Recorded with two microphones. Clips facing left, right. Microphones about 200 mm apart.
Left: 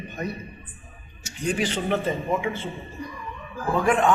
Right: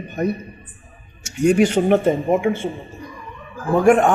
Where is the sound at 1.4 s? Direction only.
45° right (ahead or behind).